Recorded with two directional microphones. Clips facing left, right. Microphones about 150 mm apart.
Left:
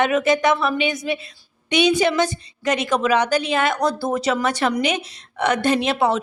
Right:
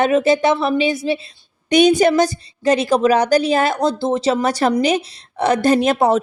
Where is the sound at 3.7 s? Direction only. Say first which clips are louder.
Right 3 dB; 25° right (ahead or behind).